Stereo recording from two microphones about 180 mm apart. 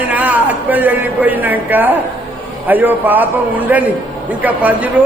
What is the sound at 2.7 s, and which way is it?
A man's voice, 10° right (ahead or behind).